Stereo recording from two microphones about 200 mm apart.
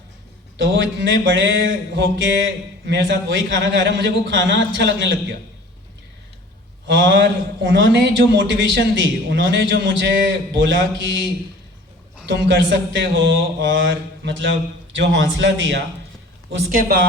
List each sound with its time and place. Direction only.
0.5 s a man's voice: 65° right (ahead or behind)
6.8 s a man's voice: 65° right (ahead or behind)
12.3 s a man's voice: 60° right (ahead or behind)